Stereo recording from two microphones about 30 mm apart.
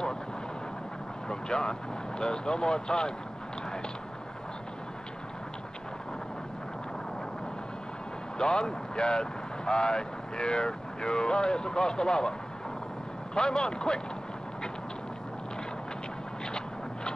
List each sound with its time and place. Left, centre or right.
1.3 s speech: left
8.4 s speech: left